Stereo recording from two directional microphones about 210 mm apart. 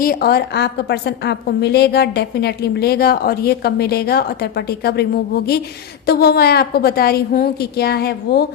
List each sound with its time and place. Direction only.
0.0 s a woman's voice: 45° left (ahead or behind)